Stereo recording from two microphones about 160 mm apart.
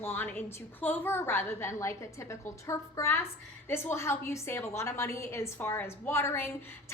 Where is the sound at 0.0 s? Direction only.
15° left (ahead or behind).